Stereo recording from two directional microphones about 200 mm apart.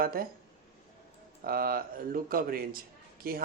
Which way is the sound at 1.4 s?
50° right (ahead or behind).